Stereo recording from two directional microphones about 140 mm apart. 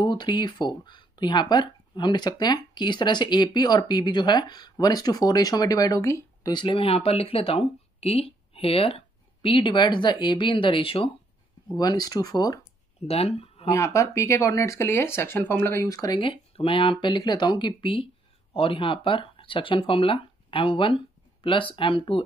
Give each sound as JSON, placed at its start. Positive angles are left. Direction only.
{"t": 0.0, "sound": "speech", "side_deg": 30}
{"t": 11.7, "sound": "speech", "side_deg": 30}
{"t": 13.0, "sound": "speech", "side_deg": 45}
{"t": 13.7, "sound": "speech", "side_deg": 20}
{"t": 16.2, "sound": "speech", "side_deg": 40}